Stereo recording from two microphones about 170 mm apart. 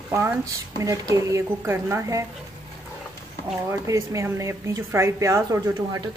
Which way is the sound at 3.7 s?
20° right (ahead or behind).